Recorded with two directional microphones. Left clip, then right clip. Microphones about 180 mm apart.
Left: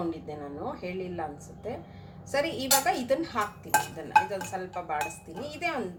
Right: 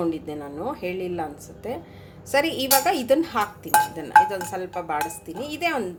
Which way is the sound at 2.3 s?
50° right (ahead or behind).